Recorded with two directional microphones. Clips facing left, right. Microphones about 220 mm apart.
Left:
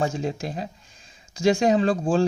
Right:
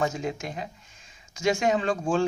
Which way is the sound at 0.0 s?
30° left (ahead or behind).